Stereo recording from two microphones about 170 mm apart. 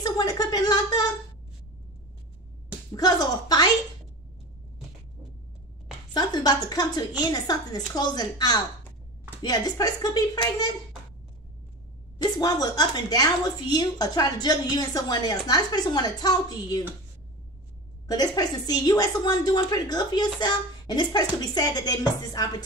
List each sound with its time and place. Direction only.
0.0 s a sound: 20° left (ahead or behind)
2.9 s a woman's voice: 20° left (ahead or behind)
6.1 s a woman's voice: 25° left (ahead or behind)
12.2 s a woman's voice: 25° left (ahead or behind)
18.0 s a woman's voice: 20° left (ahead or behind)